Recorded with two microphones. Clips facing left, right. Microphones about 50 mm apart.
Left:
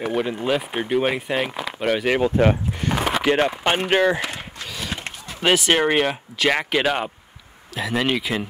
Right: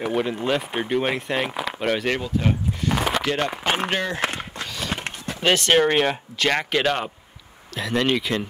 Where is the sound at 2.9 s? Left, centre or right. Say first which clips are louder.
Left 1 dB; centre.